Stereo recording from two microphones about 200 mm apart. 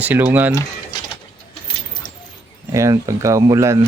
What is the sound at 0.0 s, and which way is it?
Speech, 10° right (ahead or behind).